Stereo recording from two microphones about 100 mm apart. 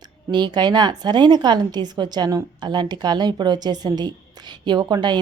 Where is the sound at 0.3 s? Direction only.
50° right (ahead or behind).